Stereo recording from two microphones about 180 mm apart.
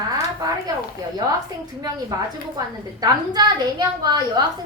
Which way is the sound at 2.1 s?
15° right (ahead or behind).